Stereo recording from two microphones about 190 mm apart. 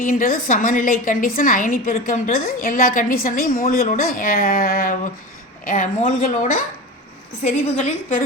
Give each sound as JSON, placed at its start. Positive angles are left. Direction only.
{"t": 0.0, "sound": "a woman's voice", "side_deg": 45}